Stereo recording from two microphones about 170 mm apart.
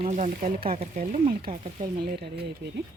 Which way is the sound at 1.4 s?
30° right (ahead or behind).